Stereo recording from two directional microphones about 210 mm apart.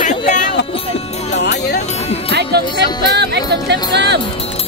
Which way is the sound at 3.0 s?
55° right (ahead or behind).